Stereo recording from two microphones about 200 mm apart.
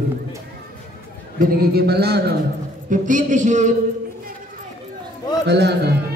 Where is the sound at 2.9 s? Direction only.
40° right (ahead or behind).